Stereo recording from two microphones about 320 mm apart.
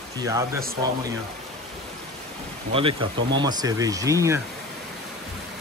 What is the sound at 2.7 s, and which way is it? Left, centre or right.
Speech, centre.